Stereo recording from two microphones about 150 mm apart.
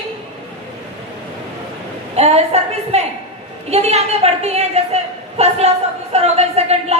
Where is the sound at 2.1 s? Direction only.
45° right (ahead or behind).